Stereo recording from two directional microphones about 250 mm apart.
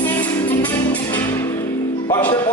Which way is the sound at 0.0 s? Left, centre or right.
Centre.